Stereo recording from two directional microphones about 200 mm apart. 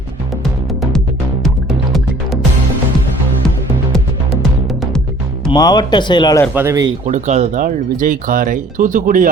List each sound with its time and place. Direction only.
5.5 s speech: 20° left (ahead or behind)
6.5 s speech: 10° right (ahead or behind)
7.0 s speech: 35° right (ahead or behind)